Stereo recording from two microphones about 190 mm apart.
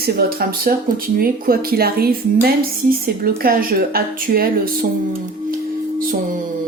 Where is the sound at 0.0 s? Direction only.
55° right (ahead or behind).